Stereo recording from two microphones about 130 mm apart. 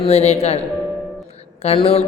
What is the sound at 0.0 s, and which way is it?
Mantra, 50° left (ahead or behind).